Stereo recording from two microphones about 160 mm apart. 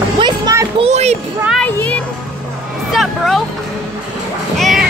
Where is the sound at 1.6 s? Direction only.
10° left (ahead or behind).